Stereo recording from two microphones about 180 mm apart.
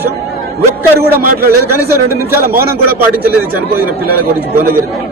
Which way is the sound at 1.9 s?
15° right (ahead or behind).